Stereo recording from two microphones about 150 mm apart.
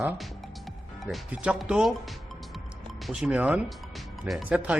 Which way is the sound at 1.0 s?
5° right (ahead or behind).